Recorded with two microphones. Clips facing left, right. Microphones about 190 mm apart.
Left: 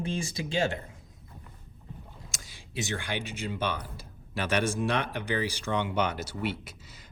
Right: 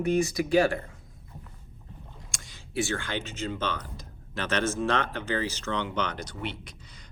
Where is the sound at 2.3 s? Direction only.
Centre (ahead or behind).